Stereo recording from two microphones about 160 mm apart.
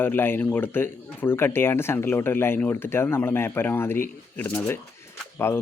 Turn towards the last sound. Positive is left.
turn(degrees=15)  # may be behind; listen again after turning